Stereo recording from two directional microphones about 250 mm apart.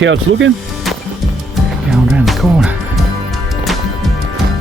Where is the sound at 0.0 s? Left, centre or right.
Right.